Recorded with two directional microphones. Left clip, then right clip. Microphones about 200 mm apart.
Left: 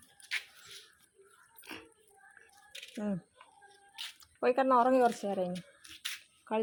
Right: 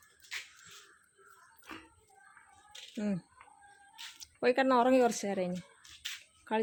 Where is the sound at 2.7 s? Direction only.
30° left (ahead or behind).